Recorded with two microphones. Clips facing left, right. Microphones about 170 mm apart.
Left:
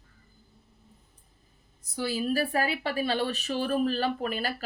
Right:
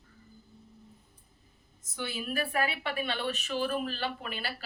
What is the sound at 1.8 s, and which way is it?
A woman's voice, 35° left (ahead or behind).